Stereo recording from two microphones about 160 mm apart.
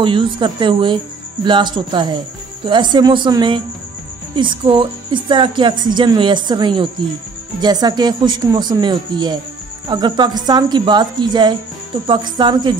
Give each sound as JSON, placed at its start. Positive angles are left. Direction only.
{"t": 0.0, "sound": "speech", "side_deg": -30}